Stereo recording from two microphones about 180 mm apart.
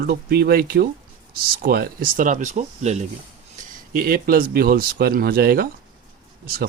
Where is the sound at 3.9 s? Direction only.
55° right (ahead or behind).